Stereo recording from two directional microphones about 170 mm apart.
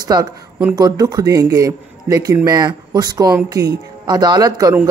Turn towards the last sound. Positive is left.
turn(degrees=-20)  # may be behind; listen again after turning